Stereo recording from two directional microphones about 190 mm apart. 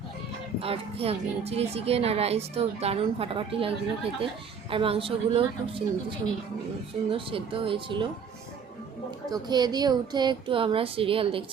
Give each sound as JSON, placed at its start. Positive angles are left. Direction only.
{"t": 0.6, "sound": "a child's voice", "side_deg": -30}
{"t": 9.3, "sound": "a woman's voice", "side_deg": -20}